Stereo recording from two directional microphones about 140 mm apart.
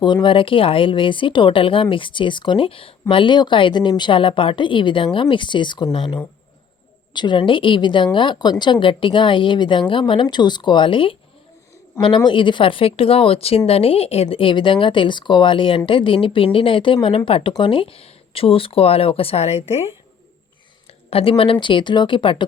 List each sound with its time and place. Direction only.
0.0 s a woman's voice: 35° left (ahead or behind)
20.8 s a woman's voice: 45° left (ahead or behind)